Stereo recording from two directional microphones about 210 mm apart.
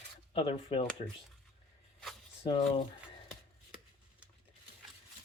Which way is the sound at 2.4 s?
25° left (ahead or behind).